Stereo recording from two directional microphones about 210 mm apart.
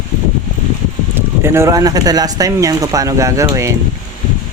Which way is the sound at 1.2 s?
10° right (ahead or behind).